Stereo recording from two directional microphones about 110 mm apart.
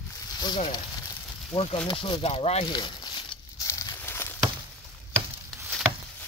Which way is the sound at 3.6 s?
30° left (ahead or behind).